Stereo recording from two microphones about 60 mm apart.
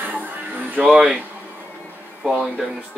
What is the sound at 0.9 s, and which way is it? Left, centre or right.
Speech, centre.